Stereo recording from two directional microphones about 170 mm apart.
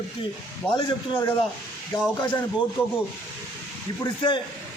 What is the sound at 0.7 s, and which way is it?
Speech, 30° left (ahead or behind).